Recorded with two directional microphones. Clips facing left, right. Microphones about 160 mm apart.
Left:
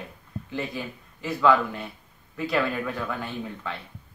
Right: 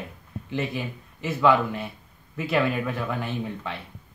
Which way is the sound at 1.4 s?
5° right (ahead or behind).